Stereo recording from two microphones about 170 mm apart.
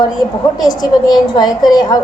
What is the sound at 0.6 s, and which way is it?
A woman's voice, 25° left (ahead or behind).